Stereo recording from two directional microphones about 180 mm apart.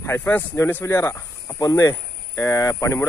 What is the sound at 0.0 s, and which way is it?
Speech, 10° left (ahead or behind).